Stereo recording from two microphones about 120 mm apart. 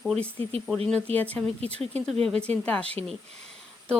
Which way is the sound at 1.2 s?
15° left (ahead or behind).